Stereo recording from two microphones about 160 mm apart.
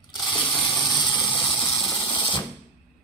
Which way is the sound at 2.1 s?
30° left (ahead or behind).